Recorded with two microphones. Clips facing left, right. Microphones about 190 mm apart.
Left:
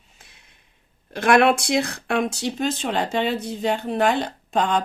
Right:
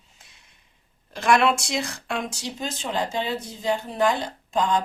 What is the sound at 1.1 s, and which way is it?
Speech, 60° left (ahead or behind).